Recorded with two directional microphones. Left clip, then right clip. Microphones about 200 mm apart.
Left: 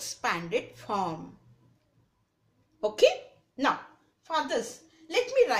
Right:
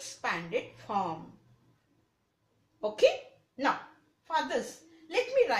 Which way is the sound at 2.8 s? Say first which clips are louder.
Left 3 dB; 45° left (ahead or behind).